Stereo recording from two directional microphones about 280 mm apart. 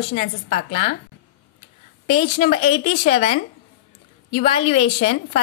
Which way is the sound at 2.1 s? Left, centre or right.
Left.